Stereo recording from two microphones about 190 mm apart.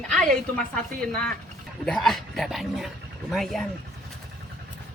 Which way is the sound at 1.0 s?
5° left (ahead or behind).